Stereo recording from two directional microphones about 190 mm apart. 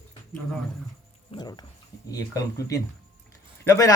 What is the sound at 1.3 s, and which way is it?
A man's voice, 20° left (ahead or behind).